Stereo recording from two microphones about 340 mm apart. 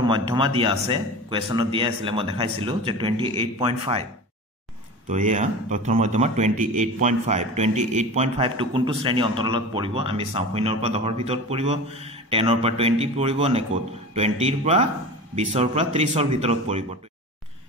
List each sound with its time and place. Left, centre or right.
0.0 s speech: centre
5.0 s speech: right